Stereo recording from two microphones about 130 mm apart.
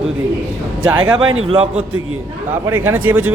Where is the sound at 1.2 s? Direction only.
40° right (ahead or behind).